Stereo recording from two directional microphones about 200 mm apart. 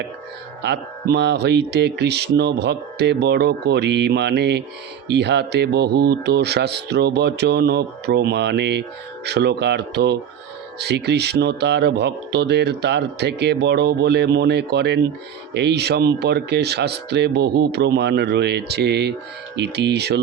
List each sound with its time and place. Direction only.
0.6 s speech: 55° right (ahead or behind)